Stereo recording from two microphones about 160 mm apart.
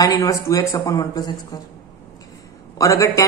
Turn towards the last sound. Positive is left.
turn(degrees=20)  # may be behind; listen again after turning